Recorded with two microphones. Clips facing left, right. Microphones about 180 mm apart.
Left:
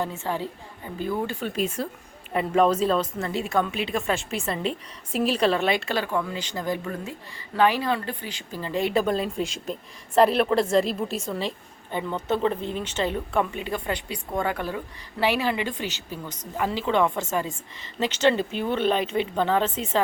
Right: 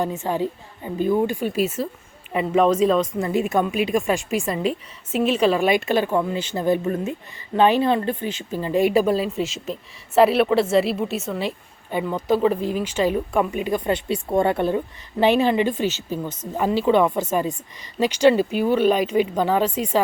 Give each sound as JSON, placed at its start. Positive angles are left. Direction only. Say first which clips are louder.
{"t": 0.0, "sound": "a woman's voice", "louder": "right 5 dB", "side_deg": -15}
{"t": 3.2, "sound": "a woman's voice", "louder": "right 5 dB", "side_deg": -15}
{"t": 15.8, "sound": "speech", "louder": "right 9 dB", "side_deg": 15}
{"t": 16.0, "sound": "a woman's voice", "louder": "right 8 dB", "side_deg": -20}